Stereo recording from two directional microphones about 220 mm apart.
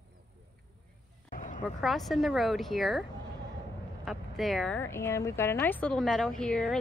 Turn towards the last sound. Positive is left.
turn(degrees=5)  # may be behind; listen again after turning